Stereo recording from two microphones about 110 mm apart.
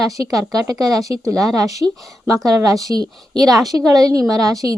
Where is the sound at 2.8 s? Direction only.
35° right (ahead or behind).